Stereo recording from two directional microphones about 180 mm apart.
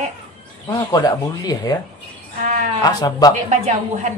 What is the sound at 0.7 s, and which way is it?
Speech, 25° left (ahead or behind).